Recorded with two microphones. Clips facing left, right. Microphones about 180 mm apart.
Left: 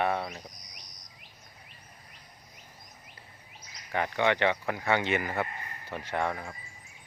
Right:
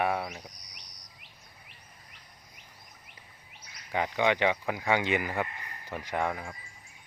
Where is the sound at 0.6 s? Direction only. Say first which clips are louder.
Left 2 dB; 70° right (ahead or behind).